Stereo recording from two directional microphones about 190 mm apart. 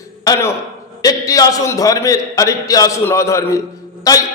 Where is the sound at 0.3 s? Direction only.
15° left (ahead or behind).